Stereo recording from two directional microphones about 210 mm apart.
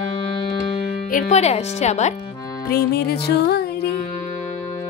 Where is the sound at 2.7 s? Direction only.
50° left (ahead or behind).